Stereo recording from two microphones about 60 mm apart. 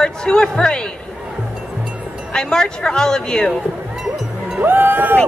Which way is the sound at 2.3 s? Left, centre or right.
Centre.